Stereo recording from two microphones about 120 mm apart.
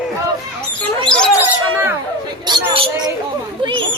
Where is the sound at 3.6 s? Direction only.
40° right (ahead or behind).